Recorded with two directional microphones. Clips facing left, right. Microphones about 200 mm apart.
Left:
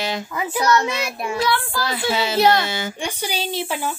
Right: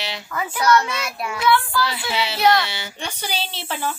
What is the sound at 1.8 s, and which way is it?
Speech, 45° left (ahead or behind).